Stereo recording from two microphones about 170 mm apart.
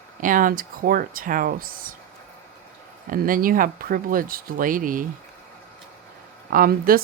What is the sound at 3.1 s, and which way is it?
Speech, 55° right (ahead or behind).